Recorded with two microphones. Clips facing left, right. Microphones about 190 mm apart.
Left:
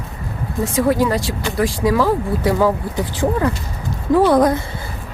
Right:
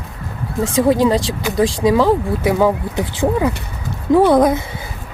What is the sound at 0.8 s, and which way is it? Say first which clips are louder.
Speech: right 3 dB; 20° right (ahead or behind).